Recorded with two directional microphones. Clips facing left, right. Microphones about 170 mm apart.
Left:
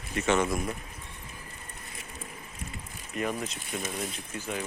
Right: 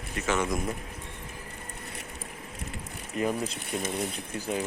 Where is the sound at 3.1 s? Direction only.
25° right (ahead or behind).